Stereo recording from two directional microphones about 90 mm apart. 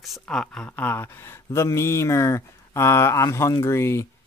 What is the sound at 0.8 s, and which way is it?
Speech, 20° left (ahead or behind).